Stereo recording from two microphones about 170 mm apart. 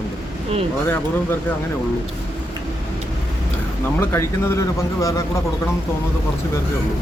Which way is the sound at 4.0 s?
15° left (ahead or behind).